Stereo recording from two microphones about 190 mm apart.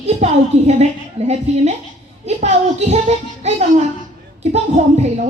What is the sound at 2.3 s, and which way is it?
Speech, 35° right (ahead or behind).